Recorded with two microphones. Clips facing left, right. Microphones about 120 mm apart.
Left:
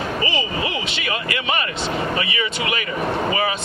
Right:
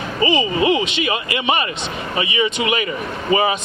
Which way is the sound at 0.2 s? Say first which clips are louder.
Right 12 dB; 20° right (ahead or behind).